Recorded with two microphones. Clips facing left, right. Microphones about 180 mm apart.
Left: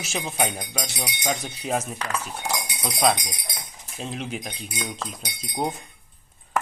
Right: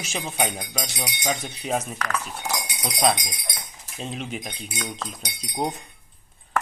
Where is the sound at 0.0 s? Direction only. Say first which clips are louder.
Even; centre (ahead or behind).